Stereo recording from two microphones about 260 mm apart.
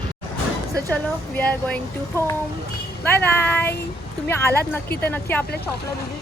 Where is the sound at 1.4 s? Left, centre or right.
Centre.